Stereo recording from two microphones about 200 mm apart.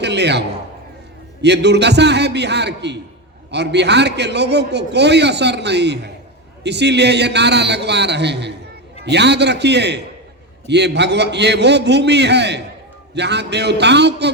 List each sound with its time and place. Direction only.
0.0 s a man's voice: 60° right (ahead or behind)